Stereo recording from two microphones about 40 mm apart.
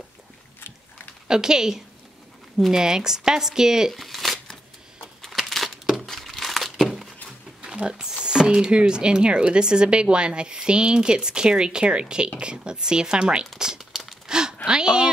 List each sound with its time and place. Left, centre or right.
0.6 s boat: left
1.2 s speech: centre
4.0 s crumpling: centre
7.6 s a sound: right
7.9 s speech: centre
13.6 s crumpling: centre
14.2 s gasp: centre
14.7 s speech: centre